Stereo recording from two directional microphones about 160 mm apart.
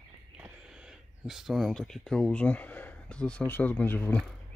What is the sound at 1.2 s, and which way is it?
Speech, centre (ahead or behind).